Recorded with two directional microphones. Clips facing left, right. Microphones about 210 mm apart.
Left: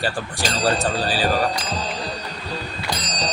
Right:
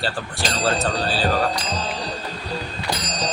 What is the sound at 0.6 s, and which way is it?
Speech, 15° left (ahead or behind).